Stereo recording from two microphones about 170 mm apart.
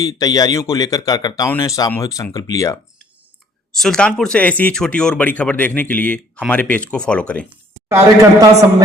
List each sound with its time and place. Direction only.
0.0 s speech: 20° left (ahead or behind)
3.8 s speech: 5° left (ahead or behind)
7.9 s a man's voice: 20° right (ahead or behind)